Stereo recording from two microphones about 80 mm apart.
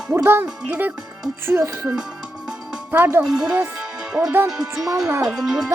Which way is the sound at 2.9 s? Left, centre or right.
Right.